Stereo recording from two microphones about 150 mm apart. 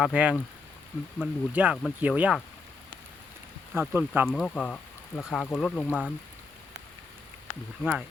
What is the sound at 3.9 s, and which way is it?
Speech, 15° right (ahead or behind).